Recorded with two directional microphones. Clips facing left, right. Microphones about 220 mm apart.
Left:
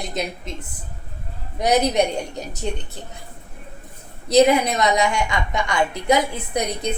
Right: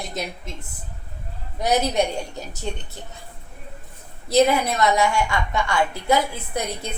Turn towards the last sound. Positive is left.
turn(degrees=15)  # may be behind; listen again after turning